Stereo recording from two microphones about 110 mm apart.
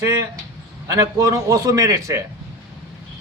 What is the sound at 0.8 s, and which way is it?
A man's voice, 30° right (ahead or behind).